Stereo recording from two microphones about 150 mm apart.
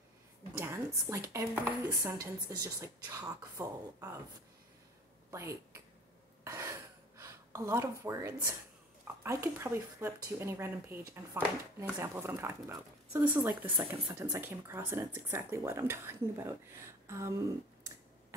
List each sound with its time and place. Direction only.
0.6 s speech: 20° right (ahead or behind)
5.3 s speech: 20° right (ahead or behind)
6.4 s a sound: 20° right (ahead or behind)
9.0 s speech: 15° right (ahead or behind)
13.7 s speech: 30° right (ahead or behind)
14.4 s speech: 15° right (ahead or behind)